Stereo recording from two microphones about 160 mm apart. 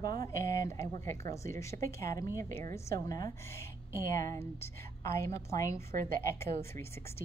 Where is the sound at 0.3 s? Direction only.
20° left (ahead or behind).